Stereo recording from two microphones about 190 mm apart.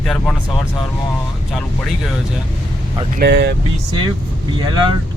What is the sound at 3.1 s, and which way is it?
Speech, 60° right (ahead or behind).